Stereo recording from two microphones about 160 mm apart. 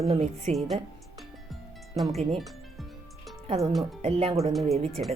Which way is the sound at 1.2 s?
Centre (ahead or behind).